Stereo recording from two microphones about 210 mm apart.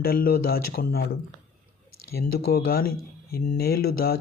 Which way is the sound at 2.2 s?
50° left (ahead or behind).